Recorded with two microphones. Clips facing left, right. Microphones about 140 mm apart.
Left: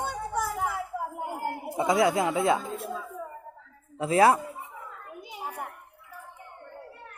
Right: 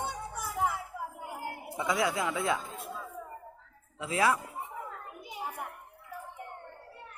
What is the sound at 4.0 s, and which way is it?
Speech, 40° left (ahead or behind).